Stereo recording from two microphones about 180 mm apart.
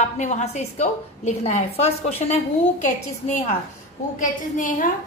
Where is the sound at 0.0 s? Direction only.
40° left (ahead or behind).